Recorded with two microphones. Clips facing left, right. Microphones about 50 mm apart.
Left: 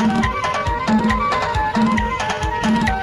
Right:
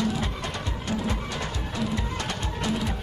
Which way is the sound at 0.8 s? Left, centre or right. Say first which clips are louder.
Left 12 dB; left.